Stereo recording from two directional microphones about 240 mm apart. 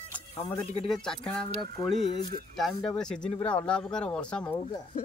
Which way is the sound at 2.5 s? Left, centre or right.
Centre.